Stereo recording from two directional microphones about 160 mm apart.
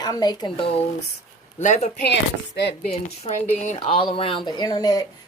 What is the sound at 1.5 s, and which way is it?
Speech, 45° left (ahead or behind).